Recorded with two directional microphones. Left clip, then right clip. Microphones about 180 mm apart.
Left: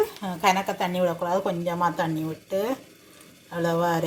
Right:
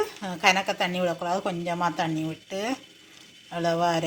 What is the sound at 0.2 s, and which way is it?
Speech, 10° right (ahead or behind).